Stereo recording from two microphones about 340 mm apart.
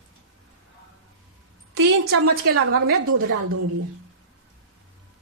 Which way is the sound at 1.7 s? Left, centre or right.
Right.